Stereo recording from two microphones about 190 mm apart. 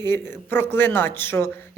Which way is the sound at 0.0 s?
10° left (ahead or behind).